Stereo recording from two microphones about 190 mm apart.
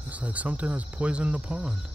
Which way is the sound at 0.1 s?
5° right (ahead or behind).